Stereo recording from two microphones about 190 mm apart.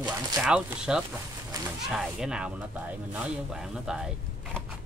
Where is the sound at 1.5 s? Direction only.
20° right (ahead or behind).